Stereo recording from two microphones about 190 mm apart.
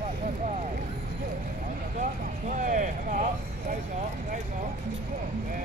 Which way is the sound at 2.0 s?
45° right (ahead or behind).